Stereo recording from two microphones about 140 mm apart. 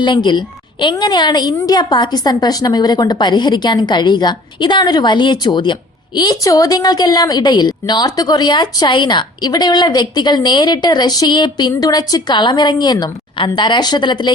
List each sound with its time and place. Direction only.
0.0 s a woman's voice: 35° left (ahead or behind)